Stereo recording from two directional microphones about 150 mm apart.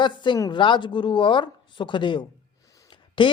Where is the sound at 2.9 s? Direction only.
30° left (ahead or behind).